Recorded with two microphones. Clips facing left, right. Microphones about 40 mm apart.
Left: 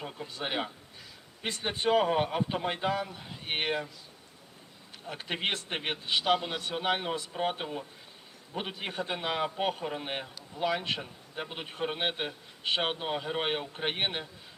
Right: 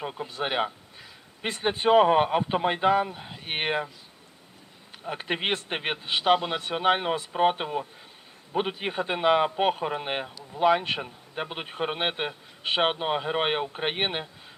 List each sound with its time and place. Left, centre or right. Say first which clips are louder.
0.0 s speech: right 6 dB; right
5.0 s speech: right 5 dB; right